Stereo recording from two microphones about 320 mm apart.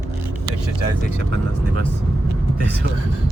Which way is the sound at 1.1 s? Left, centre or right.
Left.